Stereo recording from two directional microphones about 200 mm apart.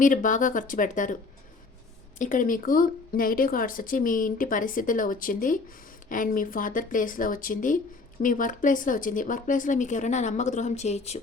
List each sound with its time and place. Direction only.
0.0 s speech: 40° left (ahead or behind)
2.1 s speech: 40° left (ahead or behind)